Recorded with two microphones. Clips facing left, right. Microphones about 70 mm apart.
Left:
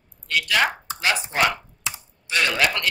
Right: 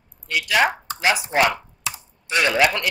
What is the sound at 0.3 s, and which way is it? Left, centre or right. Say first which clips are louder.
Speech: right 2 dB; centre.